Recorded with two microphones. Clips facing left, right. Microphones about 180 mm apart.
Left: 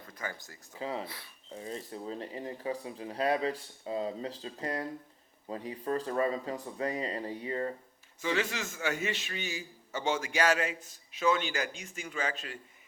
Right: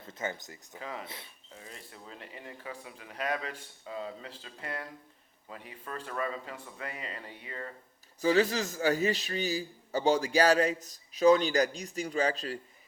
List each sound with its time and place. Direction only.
0.0 s speech: 25° right (ahead or behind)
0.8 s speech: 30° left (ahead or behind)
1.0 s speech: 20° right (ahead or behind)
1.5 s speech: 30° left (ahead or behind)
8.2 s a man's voice: 35° right (ahead or behind)